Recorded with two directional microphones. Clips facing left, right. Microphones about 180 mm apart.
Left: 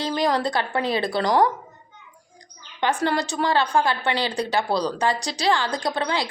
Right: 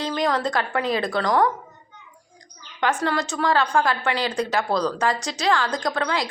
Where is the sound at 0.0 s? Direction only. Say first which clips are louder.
Left 1 dB; 35° left (ahead or behind).